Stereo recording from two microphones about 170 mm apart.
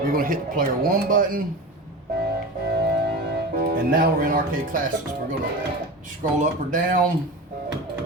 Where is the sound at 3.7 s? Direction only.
55° right (ahead or behind).